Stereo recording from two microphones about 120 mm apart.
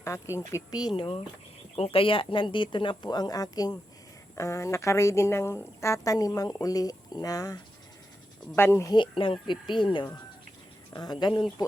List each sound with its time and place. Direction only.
0.3 s speech: 30° left (ahead or behind)
0.9 s speech: 50° left (ahead or behind); by 8.9 s 20° left (ahead or behind)
8.9 s speech: 45° left (ahead or behind)